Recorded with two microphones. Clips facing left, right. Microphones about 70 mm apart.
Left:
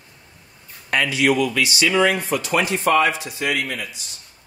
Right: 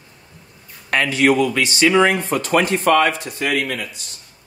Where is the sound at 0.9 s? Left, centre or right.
Right.